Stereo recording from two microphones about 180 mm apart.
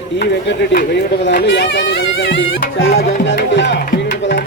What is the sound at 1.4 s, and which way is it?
Music, 85° left.